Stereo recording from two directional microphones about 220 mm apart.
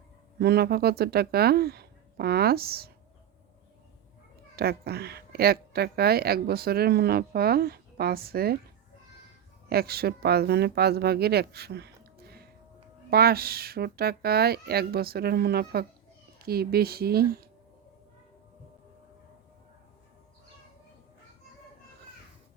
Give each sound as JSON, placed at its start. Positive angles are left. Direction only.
{"t": 0.3, "sound": "speech", "side_deg": -45}
{"t": 4.5, "sound": "speech", "side_deg": -45}
{"t": 9.6, "sound": "speech", "side_deg": -45}